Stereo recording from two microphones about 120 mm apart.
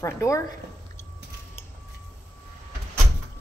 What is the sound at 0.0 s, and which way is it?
Speech, 25° left (ahead or behind).